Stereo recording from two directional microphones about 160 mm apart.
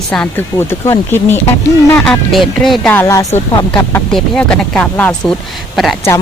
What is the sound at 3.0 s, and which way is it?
Speech, 20° left (ahead or behind).